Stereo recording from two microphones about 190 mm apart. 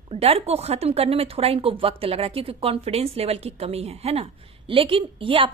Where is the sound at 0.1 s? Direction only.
30° right (ahead or behind).